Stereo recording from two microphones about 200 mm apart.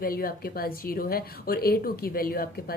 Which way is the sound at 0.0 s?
45° left (ahead or behind).